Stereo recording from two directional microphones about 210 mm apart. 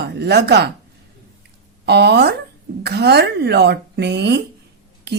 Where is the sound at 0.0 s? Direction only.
50° right (ahead or behind).